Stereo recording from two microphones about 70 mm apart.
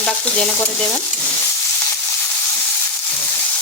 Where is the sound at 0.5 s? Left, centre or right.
Left.